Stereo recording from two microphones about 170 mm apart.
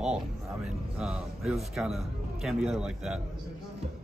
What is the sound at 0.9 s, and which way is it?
A man's voice, 5° right (ahead or behind).